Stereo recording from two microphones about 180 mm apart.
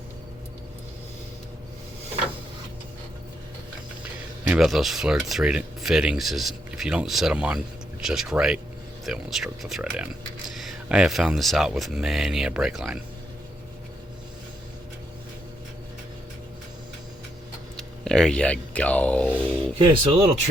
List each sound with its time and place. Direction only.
4.0 s speech: 5° right (ahead or behind)
17.7 s speech: 5° left (ahead or behind)
20.1 s speech: 30° right (ahead or behind)